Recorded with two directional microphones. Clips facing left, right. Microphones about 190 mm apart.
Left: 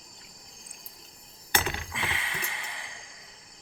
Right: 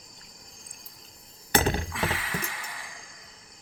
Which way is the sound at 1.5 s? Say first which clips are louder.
Right 7 dB; 40° right (ahead or behind).